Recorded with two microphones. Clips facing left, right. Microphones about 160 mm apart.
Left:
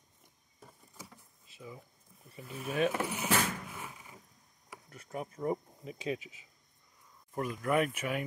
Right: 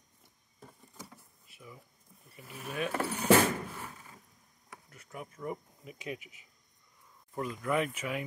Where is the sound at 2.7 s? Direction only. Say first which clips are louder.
Left 3 dB; 20° left (ahead or behind).